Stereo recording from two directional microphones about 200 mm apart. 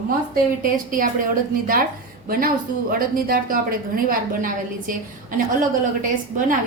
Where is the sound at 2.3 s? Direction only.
45° right (ahead or behind).